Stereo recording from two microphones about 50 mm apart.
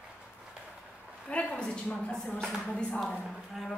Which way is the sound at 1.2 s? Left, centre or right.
Centre.